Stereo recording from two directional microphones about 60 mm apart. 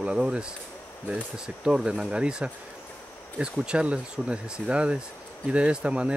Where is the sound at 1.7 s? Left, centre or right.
Centre.